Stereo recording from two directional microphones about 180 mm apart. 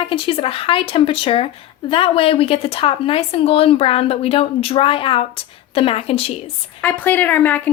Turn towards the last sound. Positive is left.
turn(degrees=10)  # may be behind; listen again after turning